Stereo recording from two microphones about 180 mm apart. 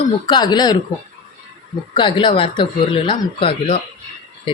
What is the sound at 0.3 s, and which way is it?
Speech, 25° left (ahead or behind).